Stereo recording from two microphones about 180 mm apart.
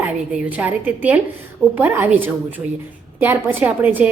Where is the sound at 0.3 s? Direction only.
10° right (ahead or behind).